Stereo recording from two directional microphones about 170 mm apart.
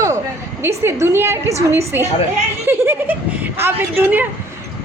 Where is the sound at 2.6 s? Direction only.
10° right (ahead or behind).